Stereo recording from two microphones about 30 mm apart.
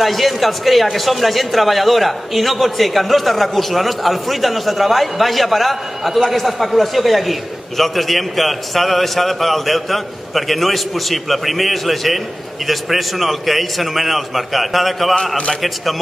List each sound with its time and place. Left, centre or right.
0.0 s a man's voice: centre